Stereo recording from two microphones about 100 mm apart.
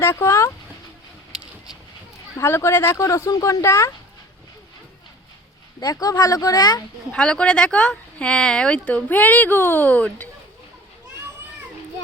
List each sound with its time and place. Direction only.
0.0 s speech: 25° left (ahead or behind)
2.4 s speech: 25° left (ahead or behind)
5.8 s speech: 40° left (ahead or behind)
7.1 s speech: 10° left (ahead or behind)